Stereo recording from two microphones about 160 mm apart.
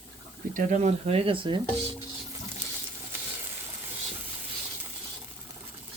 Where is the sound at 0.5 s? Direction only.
45° right (ahead or behind); by 1.6 s 30° right (ahead or behind).